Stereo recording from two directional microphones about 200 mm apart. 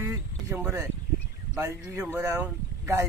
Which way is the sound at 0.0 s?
15° right (ahead or behind).